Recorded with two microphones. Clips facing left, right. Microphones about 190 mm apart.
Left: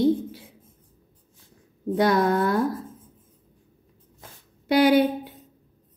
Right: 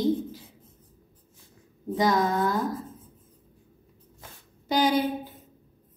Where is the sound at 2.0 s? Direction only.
65° left (ahead or behind).